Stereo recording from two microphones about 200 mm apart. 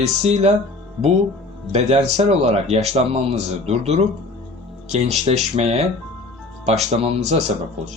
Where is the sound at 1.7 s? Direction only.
30° right (ahead or behind).